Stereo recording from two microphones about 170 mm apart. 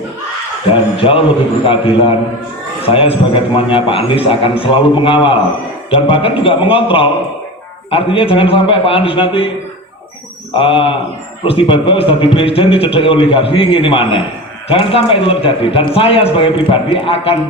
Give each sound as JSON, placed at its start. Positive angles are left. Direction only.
{"t": 0.7, "sound": "a man's voice", "side_deg": 30}
{"t": 10.6, "sound": "a man's voice", "side_deg": 30}